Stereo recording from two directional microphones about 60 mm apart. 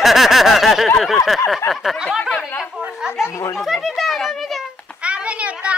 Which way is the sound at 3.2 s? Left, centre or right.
Left.